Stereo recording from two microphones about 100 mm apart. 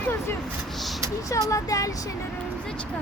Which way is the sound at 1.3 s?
35° left (ahead or behind).